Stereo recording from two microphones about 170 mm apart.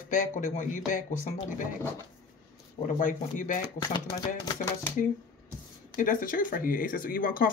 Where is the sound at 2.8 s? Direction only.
50° left (ahead or behind).